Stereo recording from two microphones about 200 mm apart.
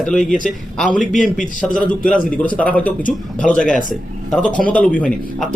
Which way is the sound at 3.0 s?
40° left (ahead or behind).